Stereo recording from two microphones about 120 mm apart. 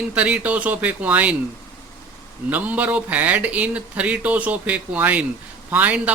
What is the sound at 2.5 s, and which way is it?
Speech, 15° right (ahead or behind).